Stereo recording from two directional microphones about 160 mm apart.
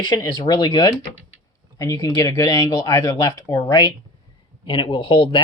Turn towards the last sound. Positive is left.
turn(degrees=30)  # may be behind; listen again after turning